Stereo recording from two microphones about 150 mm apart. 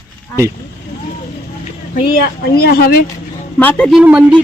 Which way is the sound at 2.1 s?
90° left.